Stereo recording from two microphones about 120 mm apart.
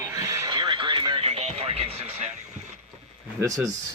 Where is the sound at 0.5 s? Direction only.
40° right (ahead or behind); by 2.8 s 75° right (ahead or behind).